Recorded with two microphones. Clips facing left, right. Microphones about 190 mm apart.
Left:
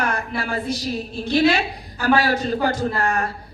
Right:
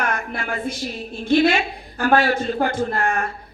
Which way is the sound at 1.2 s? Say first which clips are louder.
Right 1 dB; 50° right (ahead or behind).